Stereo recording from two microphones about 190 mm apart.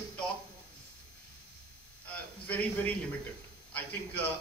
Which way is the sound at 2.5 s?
10° left (ahead or behind).